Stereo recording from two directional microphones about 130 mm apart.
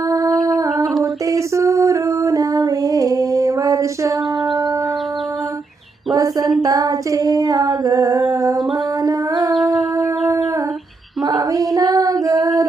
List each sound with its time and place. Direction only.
0.4 s humming: 30° right (ahead or behind)
1.3 s a sound: 25° right (ahead or behind)
6.1 s female singing: 25° right (ahead or behind)
9.0 s a sound: 30° right (ahead or behind)
9.6 s shofar: centre (ahead or behind)
11.3 s female singing: 30° right (ahead or behind)